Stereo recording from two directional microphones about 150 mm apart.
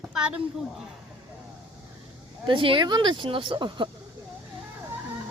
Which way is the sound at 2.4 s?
35° right (ahead or behind).